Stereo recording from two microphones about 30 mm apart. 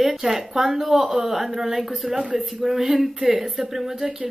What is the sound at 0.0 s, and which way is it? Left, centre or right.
Speech, centre.